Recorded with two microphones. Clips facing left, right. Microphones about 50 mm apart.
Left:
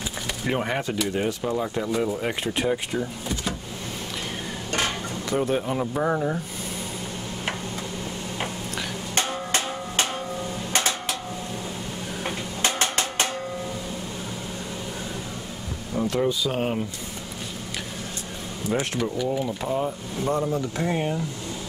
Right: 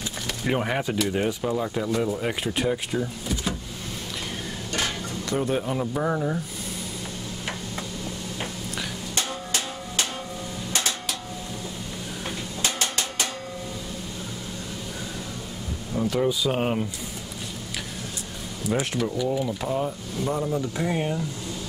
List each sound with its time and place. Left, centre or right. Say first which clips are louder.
0.5 s speech: right 1 dB; centre
5.3 s speech: left 1 dB; centre
9.1 s music: left 4 dB; left
10.7 s a sound: left 3 dB; left
12.3 s drum: left 3 dB; left
16.1 s speech: right 1 dB; centre
18.7 s speech: even; centre